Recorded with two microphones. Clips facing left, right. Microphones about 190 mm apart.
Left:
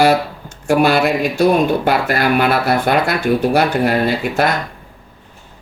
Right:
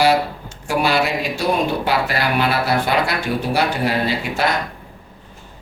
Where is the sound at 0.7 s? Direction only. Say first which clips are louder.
Left 5 dB; 50° left (ahead or behind).